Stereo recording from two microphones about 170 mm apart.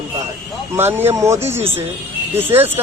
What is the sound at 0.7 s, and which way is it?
Speech, 15° right (ahead or behind).